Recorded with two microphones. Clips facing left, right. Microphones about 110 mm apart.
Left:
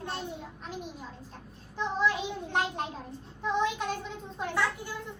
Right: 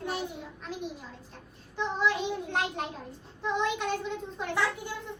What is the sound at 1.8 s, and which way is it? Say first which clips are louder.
Child singing: even; centre (ahead or behind).